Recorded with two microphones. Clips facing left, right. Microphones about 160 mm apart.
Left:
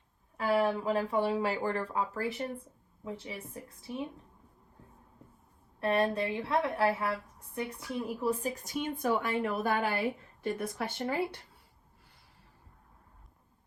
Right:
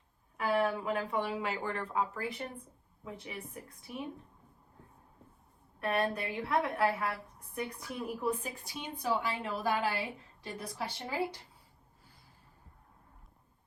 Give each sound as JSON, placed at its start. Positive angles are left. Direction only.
{"t": 0.3, "sound": "a woman's voice", "side_deg": 30}
{"t": 5.8, "sound": "a woman's voice", "side_deg": 25}